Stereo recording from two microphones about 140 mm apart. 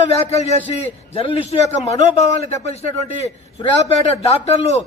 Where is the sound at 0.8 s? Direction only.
45° left (ahead or behind).